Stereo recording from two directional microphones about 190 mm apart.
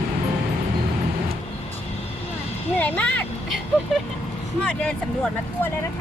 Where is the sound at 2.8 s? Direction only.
5° left (ahead or behind).